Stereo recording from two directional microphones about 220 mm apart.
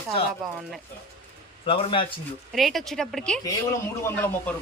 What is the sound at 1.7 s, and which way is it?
Speech, 25° left (ahead or behind).